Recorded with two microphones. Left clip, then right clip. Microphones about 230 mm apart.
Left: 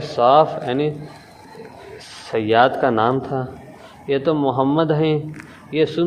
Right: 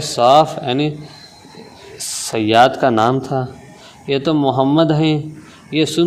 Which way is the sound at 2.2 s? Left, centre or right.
Right.